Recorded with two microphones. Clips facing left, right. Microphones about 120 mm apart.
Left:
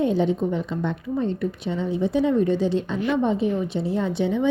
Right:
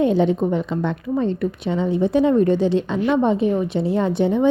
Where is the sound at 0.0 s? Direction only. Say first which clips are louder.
Right 4 dB; 70° right (ahead or behind).